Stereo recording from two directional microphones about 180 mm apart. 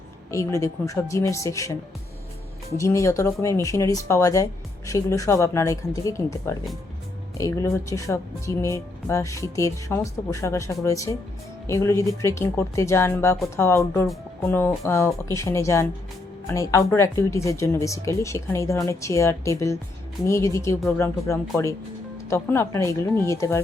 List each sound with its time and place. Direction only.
0.3 s speech: 15° left (ahead or behind)
2.7 s speech: 15° left (ahead or behind)